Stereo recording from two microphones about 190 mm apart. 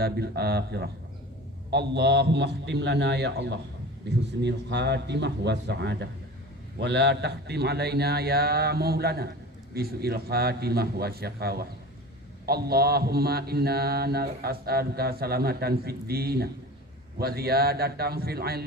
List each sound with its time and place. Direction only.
0.0 s mantra: 55° right (ahead or behind)